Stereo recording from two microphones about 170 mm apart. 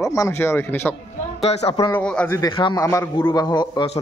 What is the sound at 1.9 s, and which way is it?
Speech, 10° left (ahead or behind).